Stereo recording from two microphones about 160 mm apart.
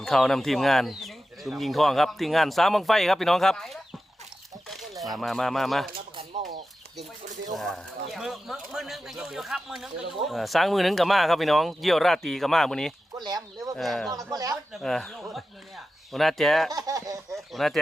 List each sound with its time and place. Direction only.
0.0 s speech: centre (ahead or behind)
7.5 s speech: centre (ahead or behind)
13.2 s a sound: 25° right (ahead or behind)
13.7 s speech: centre (ahead or behind)
14.1 s a man's voice: 25° right (ahead or behind)
14.7 s speech: centre (ahead or behind)
16.7 s a man's voice: 20° right (ahead or behind)
17.3 s a sound: centre (ahead or behind)